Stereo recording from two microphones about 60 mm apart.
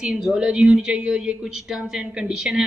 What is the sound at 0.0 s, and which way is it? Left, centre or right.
A woman's voice, centre.